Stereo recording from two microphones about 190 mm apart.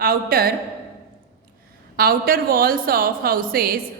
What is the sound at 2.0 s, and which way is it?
A woman's voice, 50° right (ahead or behind).